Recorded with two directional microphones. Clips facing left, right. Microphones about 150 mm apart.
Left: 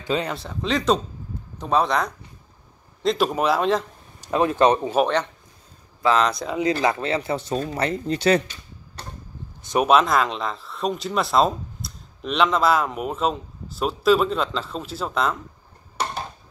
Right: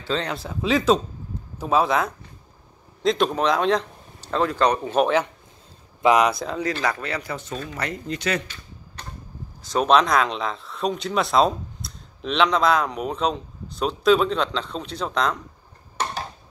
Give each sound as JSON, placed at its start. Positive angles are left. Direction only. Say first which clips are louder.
{"t": 0.0, "sound": "speech", "louder": "left 2 dB", "side_deg": 15}
{"t": 0.3, "sound": "speech", "louder": "right 2 dB", "side_deg": -5}
{"t": 4.2, "sound": "speech", "louder": "left 3 dB", "side_deg": 15}
{"t": 4.9, "sound": "speech", "louder": "right 1 dB", "side_deg": -5}
{"t": 6.8, "sound": "speech", "louder": "left 4 dB", "side_deg": 25}
{"t": 9.6, "sound": "a sound", "louder": "left 2 dB", "side_deg": 20}
{"t": 9.8, "sound": "speech", "louder": "even", "side_deg": 5}